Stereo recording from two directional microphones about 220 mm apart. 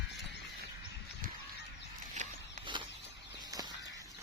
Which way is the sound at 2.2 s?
30° right (ahead or behind).